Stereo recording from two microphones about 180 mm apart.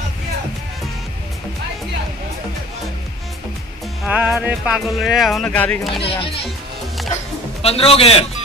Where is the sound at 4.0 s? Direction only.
5° right (ahead or behind).